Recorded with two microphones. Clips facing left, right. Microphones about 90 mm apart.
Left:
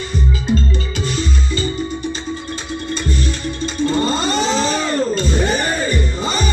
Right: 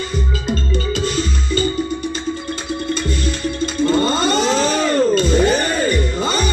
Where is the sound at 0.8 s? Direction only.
50° right (ahead or behind).